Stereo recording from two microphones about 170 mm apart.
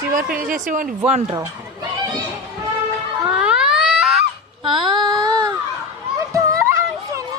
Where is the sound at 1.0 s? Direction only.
35° right (ahead or behind).